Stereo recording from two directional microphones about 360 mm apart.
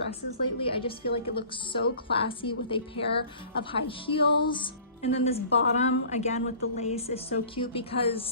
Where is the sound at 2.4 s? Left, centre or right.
Centre.